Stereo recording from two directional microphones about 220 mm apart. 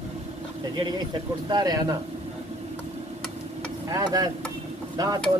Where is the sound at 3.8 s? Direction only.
15° right (ahead or behind).